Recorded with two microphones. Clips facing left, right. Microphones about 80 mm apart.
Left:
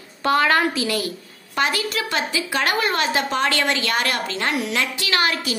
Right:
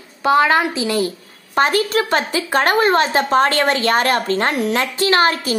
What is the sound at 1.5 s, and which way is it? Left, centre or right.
A woman's voice, right.